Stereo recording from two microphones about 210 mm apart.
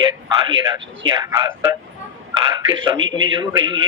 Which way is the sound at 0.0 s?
20° right (ahead or behind).